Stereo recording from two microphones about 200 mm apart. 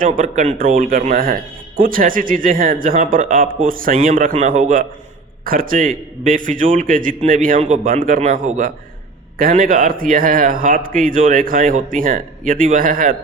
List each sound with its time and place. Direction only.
0.0 s a man's voice: 40° right (ahead or behind)